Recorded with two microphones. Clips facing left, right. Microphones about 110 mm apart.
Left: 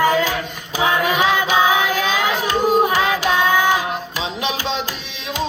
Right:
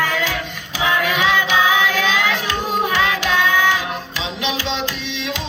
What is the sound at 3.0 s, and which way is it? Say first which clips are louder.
Music: left 1 dB; 40° left (ahead or behind).